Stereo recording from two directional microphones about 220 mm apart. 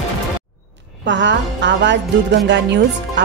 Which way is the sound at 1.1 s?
55° right (ahead or behind).